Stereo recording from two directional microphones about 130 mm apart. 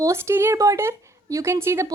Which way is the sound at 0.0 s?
20° right (ahead or behind).